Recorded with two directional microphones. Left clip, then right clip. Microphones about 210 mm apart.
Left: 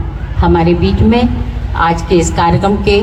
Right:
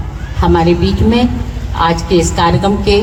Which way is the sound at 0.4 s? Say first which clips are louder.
Even; 25° left (ahead or behind).